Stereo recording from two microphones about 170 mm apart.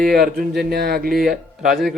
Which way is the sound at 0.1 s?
65° right (ahead or behind).